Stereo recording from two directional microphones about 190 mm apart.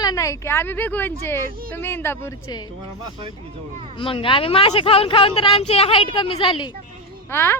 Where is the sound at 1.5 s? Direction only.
50° right (ahead or behind).